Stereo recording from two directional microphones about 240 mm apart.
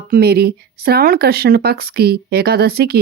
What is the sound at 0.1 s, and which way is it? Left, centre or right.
Speech, right.